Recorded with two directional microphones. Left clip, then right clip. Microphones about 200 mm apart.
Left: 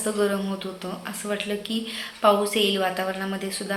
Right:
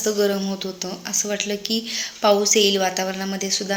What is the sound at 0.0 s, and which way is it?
A woman's voice, 45° right (ahead or behind).